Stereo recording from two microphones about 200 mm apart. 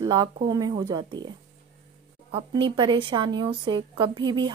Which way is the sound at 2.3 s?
25° right (ahead or behind).